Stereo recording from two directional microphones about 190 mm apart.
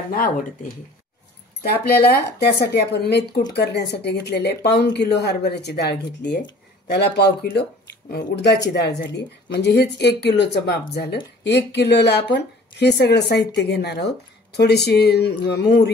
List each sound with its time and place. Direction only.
0.1 s speech: 45° left (ahead or behind)
1.6 s speech: 55° left (ahead or behind)